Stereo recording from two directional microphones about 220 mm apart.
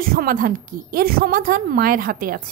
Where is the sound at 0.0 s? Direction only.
40° right (ahead or behind).